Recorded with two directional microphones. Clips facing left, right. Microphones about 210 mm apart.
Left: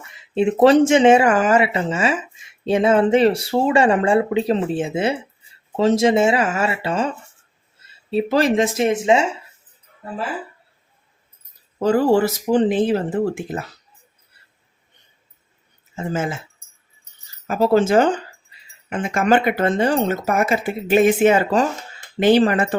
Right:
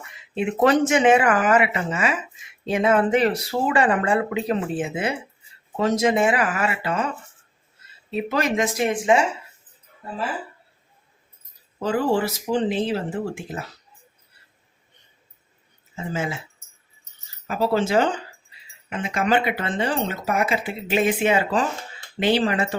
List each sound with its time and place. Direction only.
0.3 s speech: 30° left (ahead or behind)
8.1 s speech: 30° left (ahead or behind)
11.8 s speech: 40° left (ahead or behind)
16.0 s speech: 50° left (ahead or behind)
17.5 s speech: 45° left (ahead or behind)